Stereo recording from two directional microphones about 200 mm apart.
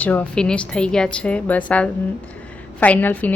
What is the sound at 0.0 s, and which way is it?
A woman's voice, 10° left (ahead or behind).